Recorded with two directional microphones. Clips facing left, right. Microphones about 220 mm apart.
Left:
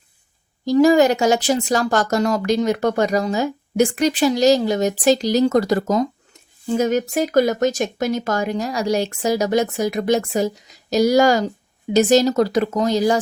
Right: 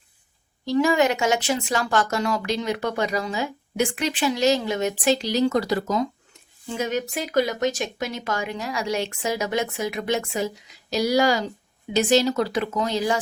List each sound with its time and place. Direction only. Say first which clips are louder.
0.6 s speech: left 7 dB; 40° left (ahead or behind)